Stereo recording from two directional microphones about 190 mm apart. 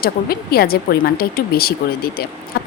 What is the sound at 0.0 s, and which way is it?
Speech, 50° left (ahead or behind).